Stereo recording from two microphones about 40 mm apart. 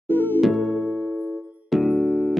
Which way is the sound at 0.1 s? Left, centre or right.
Left.